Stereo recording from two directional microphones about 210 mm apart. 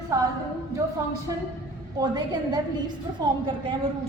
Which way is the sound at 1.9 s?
20° right (ahead or behind).